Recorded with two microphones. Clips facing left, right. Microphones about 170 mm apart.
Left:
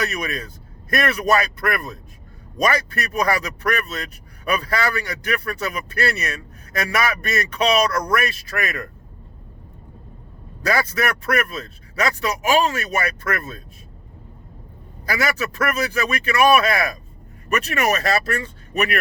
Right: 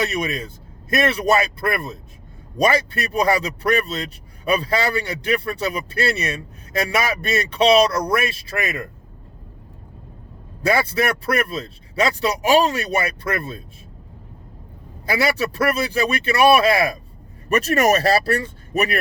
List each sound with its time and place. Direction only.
0.0 s speech: 25° right (ahead or behind)
10.6 s speech: 25° right (ahead or behind)
15.0 s a man's voice: 25° right (ahead or behind)
17.5 s a man's voice: 40° right (ahead or behind)